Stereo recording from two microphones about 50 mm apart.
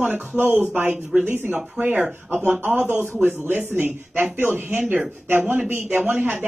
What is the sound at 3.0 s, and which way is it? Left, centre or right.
Speech, right.